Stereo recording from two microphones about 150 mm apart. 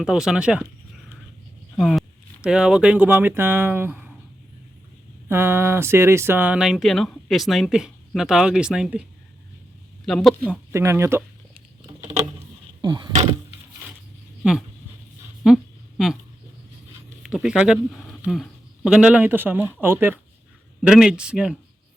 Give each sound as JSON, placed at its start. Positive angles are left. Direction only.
{"t": 0.0, "sound": "speech", "side_deg": -5}
{"t": 1.7, "sound": "speech", "side_deg": 0}
{"t": 5.3, "sound": "speech", "side_deg": -15}
{"t": 10.1, "sound": "speech", "side_deg": 0}
{"t": 10.4, "sound": "speech", "side_deg": -15}
{"t": 11.9, "sound": "a sound", "side_deg": -20}
{"t": 15.4, "sound": "a sound", "side_deg": 0}
{"t": 17.2, "sound": "speech", "side_deg": -5}
{"t": 18.9, "sound": "speech", "side_deg": -5}